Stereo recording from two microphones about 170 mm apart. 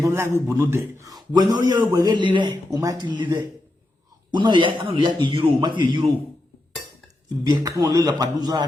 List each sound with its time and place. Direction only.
0.0 s a man's voice: 15° right (ahead or behind)
4.4 s a man's voice: 30° right (ahead or behind)
7.4 s a man's voice: 25° right (ahead or behind)